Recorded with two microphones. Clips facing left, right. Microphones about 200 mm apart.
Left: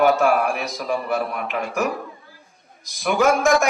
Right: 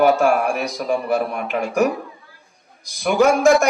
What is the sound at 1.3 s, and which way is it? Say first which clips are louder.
Speech: right 3 dB; 35° right (ahead or behind).